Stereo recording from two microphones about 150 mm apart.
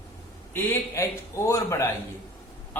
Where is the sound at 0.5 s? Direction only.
15° left (ahead or behind).